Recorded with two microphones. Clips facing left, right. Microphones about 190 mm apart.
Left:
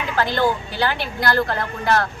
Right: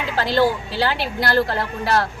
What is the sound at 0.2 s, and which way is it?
A woman's voice, 30° right (ahead or behind).